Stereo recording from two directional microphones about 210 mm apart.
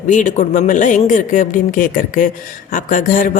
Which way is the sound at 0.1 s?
35° left (ahead or behind).